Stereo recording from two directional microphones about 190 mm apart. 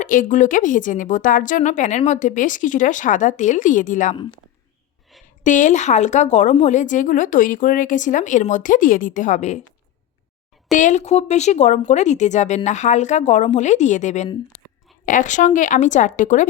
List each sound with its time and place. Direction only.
0.0 s a woman's voice: 45° left (ahead or behind)
5.4 s a woman's voice: 40° left (ahead or behind)
10.7 s a woman's voice: 40° left (ahead or behind)